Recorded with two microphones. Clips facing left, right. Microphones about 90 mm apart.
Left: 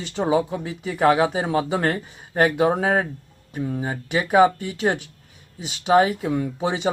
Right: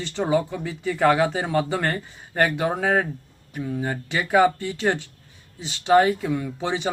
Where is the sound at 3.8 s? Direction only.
20° left (ahead or behind).